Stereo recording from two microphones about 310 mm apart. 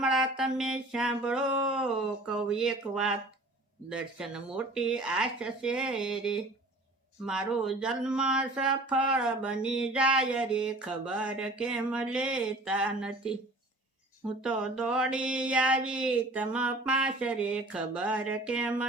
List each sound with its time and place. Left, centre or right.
0.0 s speech: centre
14.4 s speech: centre